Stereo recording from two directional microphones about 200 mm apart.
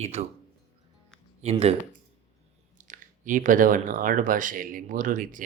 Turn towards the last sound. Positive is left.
turn(degrees=-40)  # may be behind; listen again after turning